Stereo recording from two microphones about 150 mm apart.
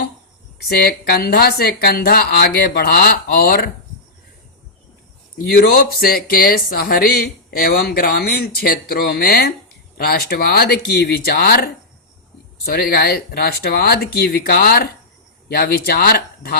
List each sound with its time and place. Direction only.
0.8 s speech: 90° left
5.4 s speech: 85° left